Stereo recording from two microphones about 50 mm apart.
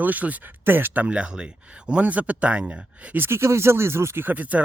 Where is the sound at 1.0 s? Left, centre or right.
Right.